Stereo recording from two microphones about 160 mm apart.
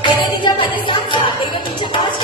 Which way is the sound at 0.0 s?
30° left (ahead or behind).